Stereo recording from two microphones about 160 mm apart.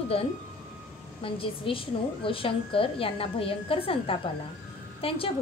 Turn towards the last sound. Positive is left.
turn(degrees=35)  # may be behind; listen again after turning